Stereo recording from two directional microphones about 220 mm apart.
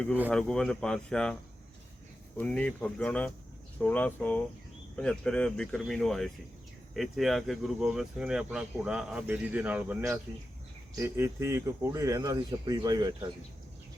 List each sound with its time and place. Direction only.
0.3 s speech: 5° left (ahead or behind)
2.4 s speech: 5° left (ahead or behind); by 13.3 s 20° right (ahead or behind)